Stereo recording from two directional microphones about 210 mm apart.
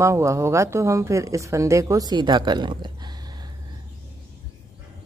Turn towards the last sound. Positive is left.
turn(degrees=-20)  # may be behind; listen again after turning